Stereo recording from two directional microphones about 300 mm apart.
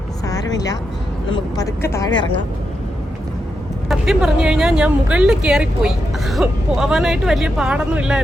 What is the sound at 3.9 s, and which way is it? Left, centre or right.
Speech, centre.